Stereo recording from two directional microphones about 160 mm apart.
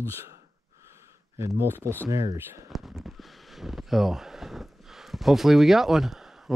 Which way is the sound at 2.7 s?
Centre (ahead or behind).